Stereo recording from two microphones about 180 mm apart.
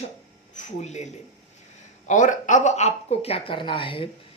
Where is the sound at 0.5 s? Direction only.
40° left (ahead or behind).